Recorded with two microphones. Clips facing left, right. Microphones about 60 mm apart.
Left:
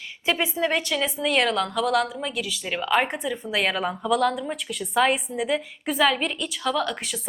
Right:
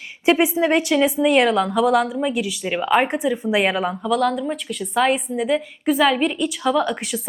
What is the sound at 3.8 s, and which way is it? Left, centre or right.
A woman's voice, centre.